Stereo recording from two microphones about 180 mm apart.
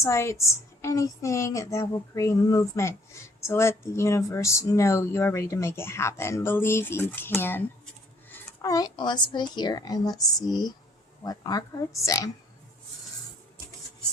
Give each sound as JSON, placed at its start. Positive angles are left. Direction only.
{"t": 0.0, "sound": "speech", "side_deg": 15}